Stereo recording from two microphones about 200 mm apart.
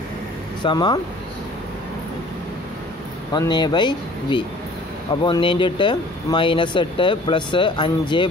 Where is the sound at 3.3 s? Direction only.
20° left (ahead or behind).